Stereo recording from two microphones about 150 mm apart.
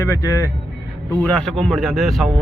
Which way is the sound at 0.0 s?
20° left (ahead or behind).